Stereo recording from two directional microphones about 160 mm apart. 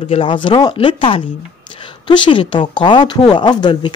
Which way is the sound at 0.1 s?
35° left (ahead or behind).